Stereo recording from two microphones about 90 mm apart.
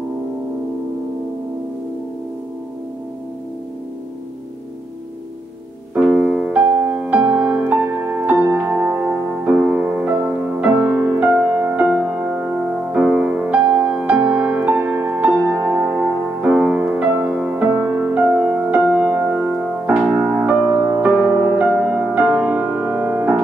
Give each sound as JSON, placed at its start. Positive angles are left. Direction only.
{"t": 5.9, "sound": "music", "side_deg": -10}
{"t": 21.6, "sound": "music", "side_deg": 5}
{"t": 21.9, "sound": "music", "side_deg": -10}